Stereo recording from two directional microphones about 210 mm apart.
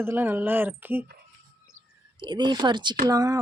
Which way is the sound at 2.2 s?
20° right (ahead or behind).